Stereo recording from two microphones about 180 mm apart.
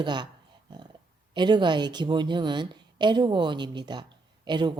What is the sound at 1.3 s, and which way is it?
Speech, 25° right (ahead or behind).